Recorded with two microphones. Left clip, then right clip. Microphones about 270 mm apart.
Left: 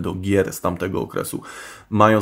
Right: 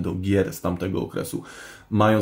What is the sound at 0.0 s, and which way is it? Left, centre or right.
Speech, left.